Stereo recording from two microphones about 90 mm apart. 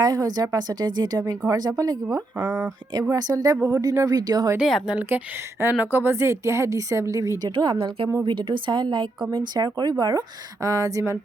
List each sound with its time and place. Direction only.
0.0 s a woman's voice: 50° right (ahead or behind)
4.6 s speech: 5° right (ahead or behind)
4.9 s a woman's voice: 25° right (ahead or behind)
7.5 s a woman's voice: 65° right (ahead or behind)
8.2 s a woman's voice: 65° right (ahead or behind); by 11.1 s 40° right (ahead or behind)